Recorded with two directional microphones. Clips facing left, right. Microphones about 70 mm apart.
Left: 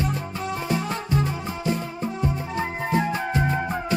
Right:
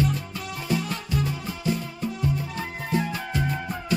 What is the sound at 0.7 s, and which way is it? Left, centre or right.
Music, left.